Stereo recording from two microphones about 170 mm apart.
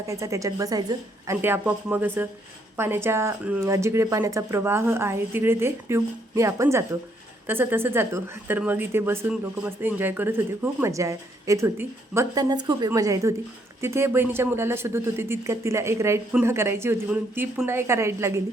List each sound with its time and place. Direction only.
0.1 s a woman's voice: 20° right (ahead or behind)
1.4 s a woman's voice: 10° right (ahead or behind)